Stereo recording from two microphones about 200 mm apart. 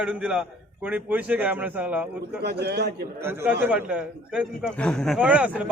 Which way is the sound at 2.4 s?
55° right (ahead or behind).